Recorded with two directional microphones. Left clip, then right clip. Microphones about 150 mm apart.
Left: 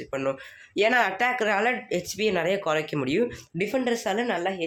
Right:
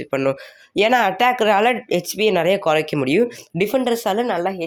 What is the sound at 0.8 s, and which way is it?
Speech, 45° right (ahead or behind).